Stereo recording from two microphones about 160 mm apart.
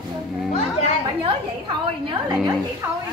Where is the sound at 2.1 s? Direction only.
25° right (ahead or behind).